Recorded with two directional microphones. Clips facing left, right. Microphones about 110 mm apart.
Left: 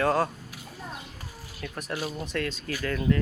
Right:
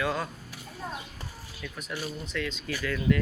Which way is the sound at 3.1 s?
35° left (ahead or behind).